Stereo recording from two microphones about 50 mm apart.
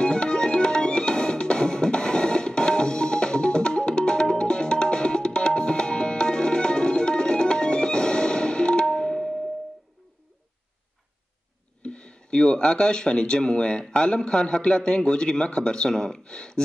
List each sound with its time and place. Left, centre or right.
0.0 s music: centre
11.8 s speech: left